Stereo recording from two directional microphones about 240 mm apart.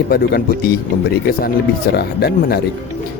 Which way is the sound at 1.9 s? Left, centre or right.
Left.